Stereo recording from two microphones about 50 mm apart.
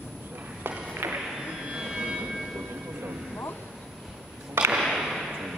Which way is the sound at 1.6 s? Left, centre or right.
Centre.